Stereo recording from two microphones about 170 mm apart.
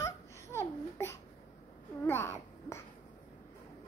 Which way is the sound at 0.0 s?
15° left (ahead or behind).